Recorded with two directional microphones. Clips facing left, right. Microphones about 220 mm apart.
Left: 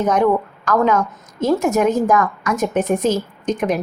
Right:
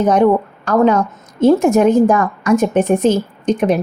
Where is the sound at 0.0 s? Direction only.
30° right (ahead or behind).